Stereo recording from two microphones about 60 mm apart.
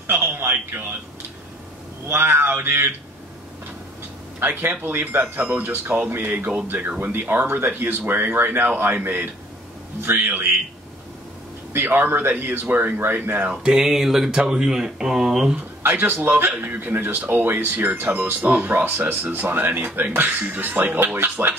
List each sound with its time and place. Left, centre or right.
0.0 s a sound: right
2.0 s speech: right
4.4 s speech: right
11.7 s speech: right
13.5 s speech: centre
15.8 s speech: right